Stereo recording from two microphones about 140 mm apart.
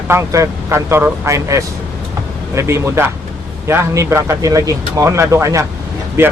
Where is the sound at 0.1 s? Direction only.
20° right (ahead or behind).